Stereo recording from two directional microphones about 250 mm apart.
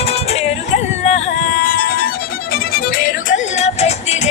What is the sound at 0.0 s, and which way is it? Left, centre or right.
Music, left.